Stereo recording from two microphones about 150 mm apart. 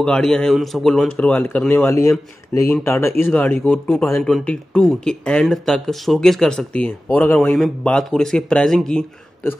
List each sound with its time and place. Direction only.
0.0 s a man's voice: 5° left (ahead or behind)
2.0 s a man's voice: 20° left (ahead or behind); by 9.0 s 5° left (ahead or behind)